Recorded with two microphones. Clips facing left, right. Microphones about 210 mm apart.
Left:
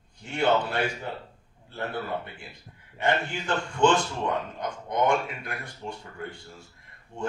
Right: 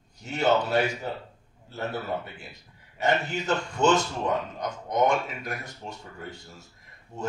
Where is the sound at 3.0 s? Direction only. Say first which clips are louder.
Right 1 dB; 40° right (ahead or behind).